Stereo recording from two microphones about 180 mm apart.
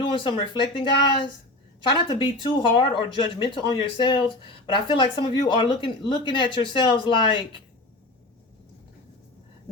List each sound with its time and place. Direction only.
0.0 s speech: 30° left (ahead or behind)